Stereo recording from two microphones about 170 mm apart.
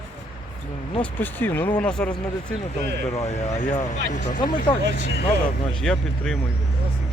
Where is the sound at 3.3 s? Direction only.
40° left (ahead or behind).